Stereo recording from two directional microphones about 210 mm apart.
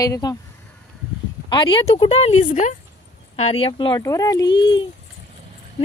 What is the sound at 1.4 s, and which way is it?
Speech, 25° left (ahead or behind).